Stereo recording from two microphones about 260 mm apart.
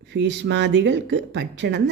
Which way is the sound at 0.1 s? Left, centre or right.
Right.